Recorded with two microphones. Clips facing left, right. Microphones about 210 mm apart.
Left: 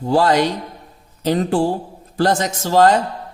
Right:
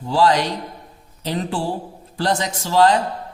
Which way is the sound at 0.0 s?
45° left (ahead or behind).